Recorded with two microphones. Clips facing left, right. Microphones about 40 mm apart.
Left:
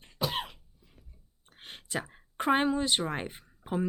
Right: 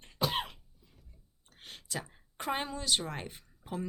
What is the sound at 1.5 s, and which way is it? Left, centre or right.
A woman's voice, left.